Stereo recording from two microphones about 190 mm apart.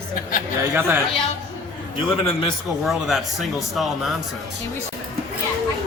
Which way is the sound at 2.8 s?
Centre (ahead or behind).